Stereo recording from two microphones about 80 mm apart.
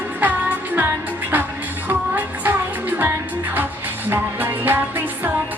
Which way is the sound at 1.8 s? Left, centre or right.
Right.